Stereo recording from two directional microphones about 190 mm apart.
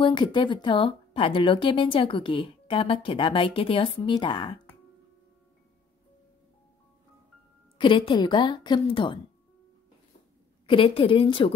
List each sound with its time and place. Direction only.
0.0 s a woman's voice: 25° left (ahead or behind)
7.7 s a woman's voice: 25° left (ahead or behind)
10.7 s a woman's voice: 25° left (ahead or behind)